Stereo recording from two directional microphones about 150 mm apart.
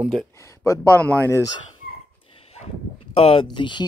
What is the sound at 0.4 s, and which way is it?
Speech, 20° left (ahead or behind).